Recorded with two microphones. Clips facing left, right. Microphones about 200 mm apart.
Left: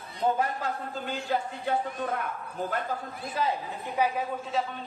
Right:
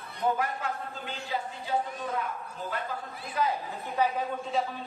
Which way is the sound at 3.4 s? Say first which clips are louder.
Even; 30° left (ahead or behind).